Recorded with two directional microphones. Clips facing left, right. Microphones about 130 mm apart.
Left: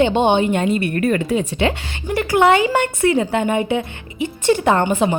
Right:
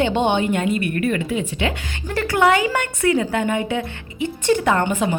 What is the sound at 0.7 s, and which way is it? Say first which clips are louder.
Speech: left 3 dB; 35° left (ahead or behind).